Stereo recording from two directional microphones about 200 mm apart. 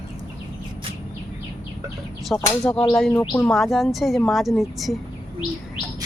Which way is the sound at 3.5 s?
Centre (ahead or behind).